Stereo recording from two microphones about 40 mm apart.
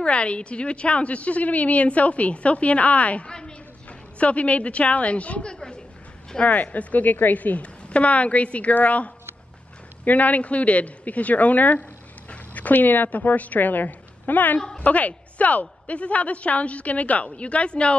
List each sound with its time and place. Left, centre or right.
0.0 s a woman's voice: left
3.3 s a woman's voice: left
4.2 s a woman's voice: left
5.5 s a woman's voice: left
6.4 s a woman's voice: left